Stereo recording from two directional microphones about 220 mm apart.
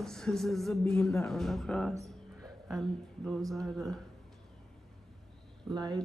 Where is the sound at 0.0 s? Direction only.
Centre (ahead or behind).